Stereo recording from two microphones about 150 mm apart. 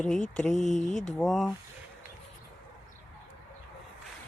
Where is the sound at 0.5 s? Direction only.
55° left (ahead or behind).